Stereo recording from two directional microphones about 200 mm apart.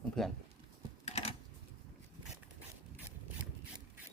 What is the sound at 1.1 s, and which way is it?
Typing, 30° left (ahead or behind).